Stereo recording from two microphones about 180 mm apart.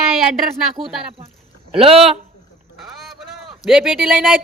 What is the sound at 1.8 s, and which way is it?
Speech, 35° right (ahead or behind).